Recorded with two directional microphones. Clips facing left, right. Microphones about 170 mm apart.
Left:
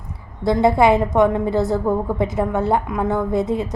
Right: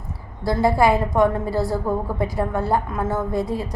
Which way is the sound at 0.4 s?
20° left (ahead or behind).